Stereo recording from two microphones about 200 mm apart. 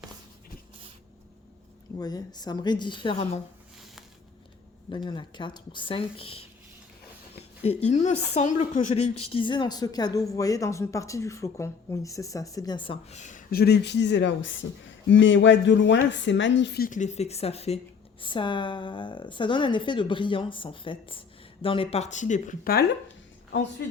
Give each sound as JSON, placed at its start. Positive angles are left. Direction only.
{"t": 2.0, "sound": "a woman's voice", "side_deg": 20}
{"t": 4.9, "sound": "a woman's voice", "side_deg": 20}
{"t": 7.6, "sound": "a woman's voice", "side_deg": 30}